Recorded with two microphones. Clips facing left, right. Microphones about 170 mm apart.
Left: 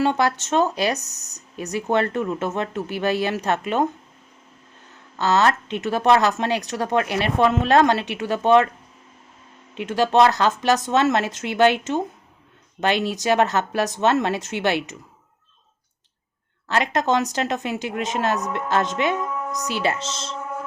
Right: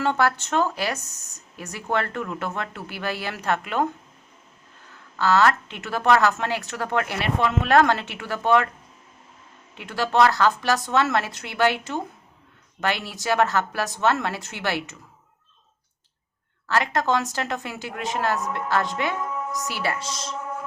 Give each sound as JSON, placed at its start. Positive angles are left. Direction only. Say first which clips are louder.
{"t": 0.0, "sound": "a woman's voice", "louder": "left 2 dB", "side_deg": 15}
{"t": 5.1, "sound": "a woman's voice", "louder": "even", "side_deg": 20}
{"t": 9.7, "sound": "a woman's voice", "louder": "left 4 dB", "side_deg": 20}
{"t": 16.6, "sound": "a woman's voice", "louder": "left 2 dB", "side_deg": 20}